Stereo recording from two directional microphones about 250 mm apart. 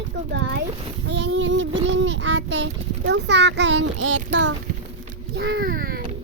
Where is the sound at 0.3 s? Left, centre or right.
Right.